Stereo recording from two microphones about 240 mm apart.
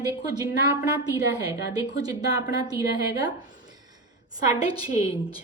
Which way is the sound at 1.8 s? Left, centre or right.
Centre.